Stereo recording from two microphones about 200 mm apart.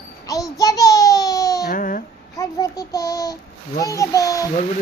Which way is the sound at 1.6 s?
45° left (ahead or behind).